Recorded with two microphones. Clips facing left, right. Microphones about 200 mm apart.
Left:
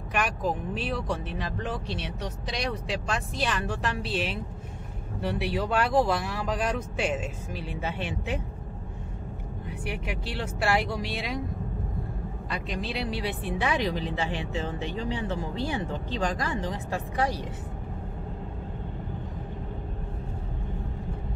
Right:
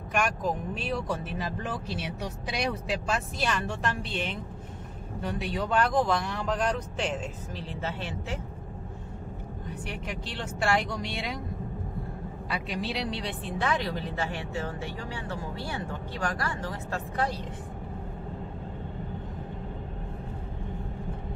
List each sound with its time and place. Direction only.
0.1 s speech: centre (ahead or behind)
9.7 s speech: 10° left (ahead or behind)
12.4 s speech: 5° right (ahead or behind); by 17.4 s 15° left (ahead or behind)